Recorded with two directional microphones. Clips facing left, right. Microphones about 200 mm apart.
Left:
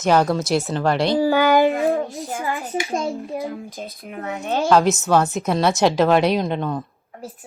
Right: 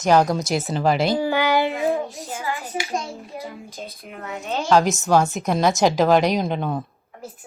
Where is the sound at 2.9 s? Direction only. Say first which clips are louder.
Left 5 dB; 60° left (ahead or behind).